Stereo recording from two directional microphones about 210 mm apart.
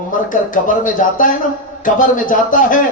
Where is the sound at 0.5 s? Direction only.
40° left (ahead or behind).